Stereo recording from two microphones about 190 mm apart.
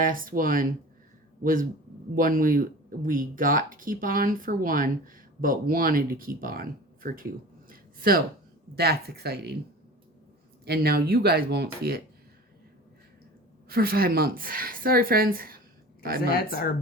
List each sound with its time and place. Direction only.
0.0 s speech: 45° right (ahead or behind)
2.1 s speech: 45° right (ahead or behind)
7.7 s a sound: 50° right (ahead or behind)
8.7 s speech: 55° right (ahead or behind)
10.7 s speech: 55° right (ahead or behind)
13.7 s speech: 55° right (ahead or behind)
16.3 s speech: 50° left (ahead or behind)